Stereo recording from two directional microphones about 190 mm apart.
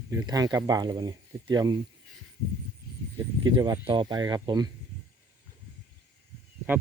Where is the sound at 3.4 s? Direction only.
25° right (ahead or behind).